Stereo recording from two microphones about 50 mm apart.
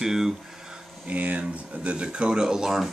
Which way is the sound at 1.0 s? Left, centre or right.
Right.